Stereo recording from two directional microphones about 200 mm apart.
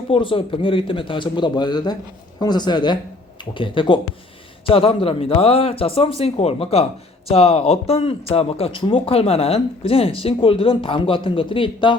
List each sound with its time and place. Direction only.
0.1 s speech: 25° left (ahead or behind)